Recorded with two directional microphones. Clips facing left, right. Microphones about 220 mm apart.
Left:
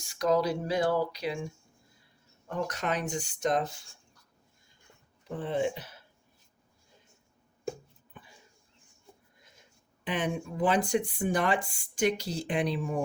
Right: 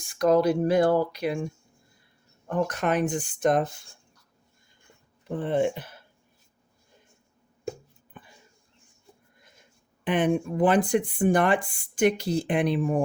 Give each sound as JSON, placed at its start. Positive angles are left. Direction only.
{"t": 0.0, "sound": "speech", "side_deg": -55}
{"t": 2.5, "sound": "speech", "side_deg": -55}
{"t": 5.4, "sound": "speech", "side_deg": -55}
{"t": 9.4, "sound": "speech", "side_deg": -55}